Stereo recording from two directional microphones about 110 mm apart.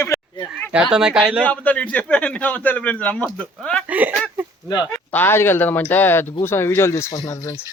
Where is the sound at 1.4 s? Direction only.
10° left (ahead or behind).